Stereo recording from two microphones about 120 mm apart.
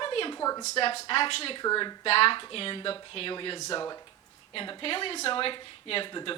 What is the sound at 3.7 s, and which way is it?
Speech, 35° left (ahead or behind).